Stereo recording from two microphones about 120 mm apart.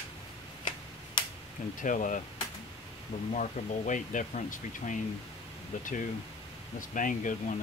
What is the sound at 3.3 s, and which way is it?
Speech, 90° left.